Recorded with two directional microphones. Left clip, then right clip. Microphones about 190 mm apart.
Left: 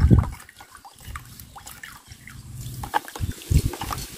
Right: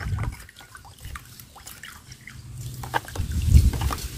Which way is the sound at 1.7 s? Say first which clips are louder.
Right 1 dB; centre (ahead or behind).